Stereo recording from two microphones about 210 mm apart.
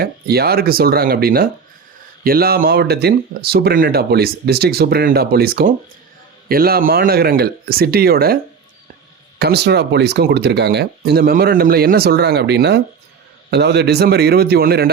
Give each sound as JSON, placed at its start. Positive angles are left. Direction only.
{"t": 0.0, "sound": "speech", "side_deg": -50}
{"t": 9.4, "sound": "speech", "side_deg": -50}